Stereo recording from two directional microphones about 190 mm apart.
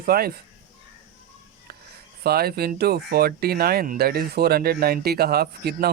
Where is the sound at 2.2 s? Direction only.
55° right (ahead or behind).